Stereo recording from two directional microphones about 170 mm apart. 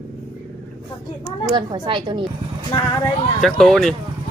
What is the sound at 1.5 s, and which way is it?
Speech, 25° right (ahead or behind).